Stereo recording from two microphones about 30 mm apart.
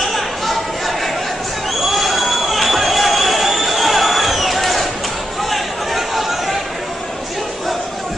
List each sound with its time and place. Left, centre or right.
0.0 s chatter: centre
1.9 s a sound: centre
5.5 s chatter: centre